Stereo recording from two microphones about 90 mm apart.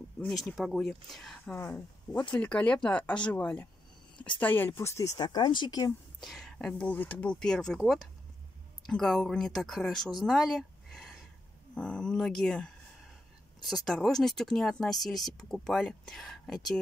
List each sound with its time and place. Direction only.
0.3 s speech: centre (ahead or behind)
1.4 s speech: 20° left (ahead or behind); by 5.2 s 35° left (ahead or behind)
5.2 s speech: 55° left (ahead or behind)
6.2 s speech: 5° left (ahead or behind)